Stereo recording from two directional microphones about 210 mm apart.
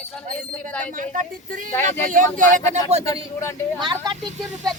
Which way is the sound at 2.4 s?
35° right (ahead or behind).